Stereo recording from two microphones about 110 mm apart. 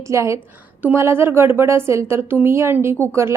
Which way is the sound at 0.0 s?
25° right (ahead or behind).